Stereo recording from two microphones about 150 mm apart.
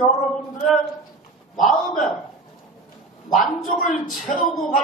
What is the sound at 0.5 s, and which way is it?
A man's voice, 5° left (ahead or behind).